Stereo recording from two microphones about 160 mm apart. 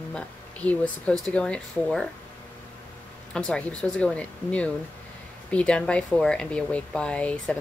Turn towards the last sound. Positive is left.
turn(degrees=5)  # may be behind; listen again after turning